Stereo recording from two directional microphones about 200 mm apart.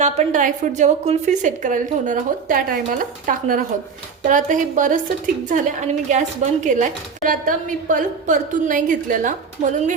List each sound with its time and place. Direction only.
0.0 s a woman's voice: 35° right (ahead or behind)